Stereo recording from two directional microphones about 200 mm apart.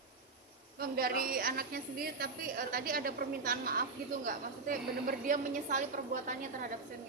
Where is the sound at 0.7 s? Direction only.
50° right (ahead or behind).